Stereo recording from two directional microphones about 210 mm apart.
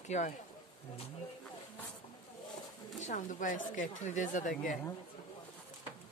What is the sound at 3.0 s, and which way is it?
Speech, 35° left (ahead or behind).